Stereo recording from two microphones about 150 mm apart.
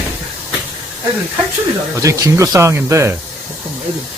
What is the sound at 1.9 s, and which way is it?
Speech, 20° right (ahead or behind).